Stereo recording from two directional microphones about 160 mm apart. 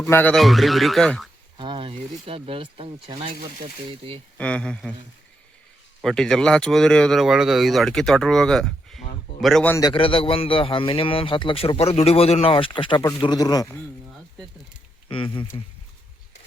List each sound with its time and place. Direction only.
0.0 s speech: 15° left (ahead or behind)
0.3 s speech: centre (ahead or behind)
1.5 s speech: 30° right (ahead or behind)
4.4 s speech: 5° left (ahead or behind)
6.0 s speech: 5° left (ahead or behind)
9.9 s a man's voice: 35° left (ahead or behind)
15.1 s a man's voice: 30° left (ahead or behind)